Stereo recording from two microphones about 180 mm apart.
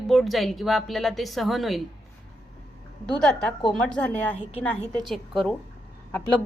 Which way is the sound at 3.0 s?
5° left (ahead or behind).